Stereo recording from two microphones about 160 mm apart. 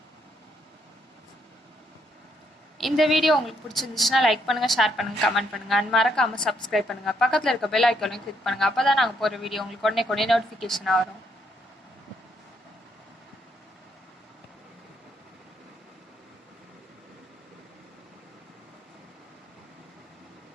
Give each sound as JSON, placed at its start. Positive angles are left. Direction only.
{"t": 2.7, "sound": "a woman's voice", "side_deg": 0}